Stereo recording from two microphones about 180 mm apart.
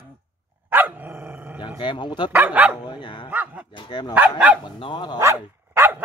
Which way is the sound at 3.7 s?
25° left (ahead or behind).